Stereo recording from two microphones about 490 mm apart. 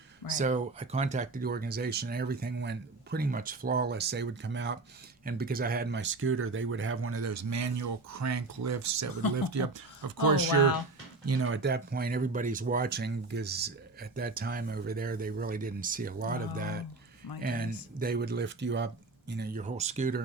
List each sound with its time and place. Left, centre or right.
0.3 s speech: centre; by 9.8 s right
11.3 s speech: right